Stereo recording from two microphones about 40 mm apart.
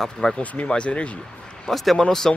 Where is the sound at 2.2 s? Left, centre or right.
Centre.